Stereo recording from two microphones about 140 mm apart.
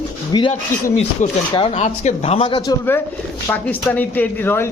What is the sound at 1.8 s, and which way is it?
Speech, 50° left (ahead or behind).